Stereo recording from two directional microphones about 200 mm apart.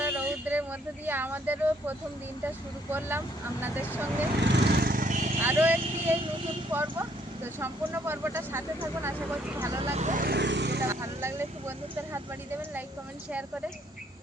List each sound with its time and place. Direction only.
0.0 s speech: 10° right (ahead or behind)
4.5 s vehicle: 55° right (ahead or behind); by 5.4 s 35° right (ahead or behind)
5.4 s speech: 10° right (ahead or behind)
9.8 s speech: 35° right (ahead or behind); by 10.8 s 60° right (ahead or behind)
10.8 s speech: 15° right (ahead or behind)